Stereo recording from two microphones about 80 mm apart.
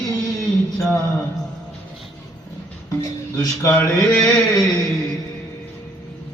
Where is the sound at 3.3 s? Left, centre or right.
Left.